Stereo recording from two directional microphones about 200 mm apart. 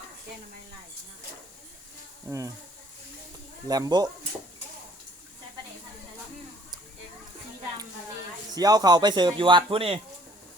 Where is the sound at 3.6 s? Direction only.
20° right (ahead or behind).